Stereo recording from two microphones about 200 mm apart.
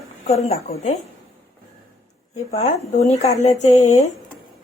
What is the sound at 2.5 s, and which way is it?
A woman's voice, 35° left (ahead or behind).